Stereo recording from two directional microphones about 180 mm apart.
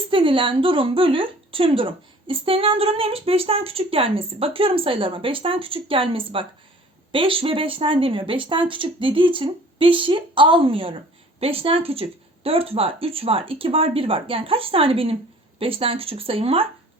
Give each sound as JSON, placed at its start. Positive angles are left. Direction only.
{"t": 0.1, "sound": "speech", "side_deg": -30}